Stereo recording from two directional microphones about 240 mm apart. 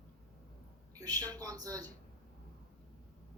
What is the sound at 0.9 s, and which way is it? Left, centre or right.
Speech, centre.